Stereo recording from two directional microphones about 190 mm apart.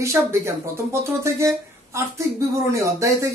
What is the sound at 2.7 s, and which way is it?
Speech, 15° right (ahead or behind).